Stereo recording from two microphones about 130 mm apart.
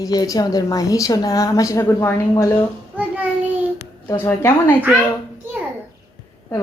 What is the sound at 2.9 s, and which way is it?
Child singing, 15° right (ahead or behind).